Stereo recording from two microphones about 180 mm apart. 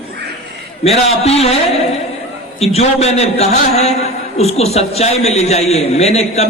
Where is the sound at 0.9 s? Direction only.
35° left (ahead or behind).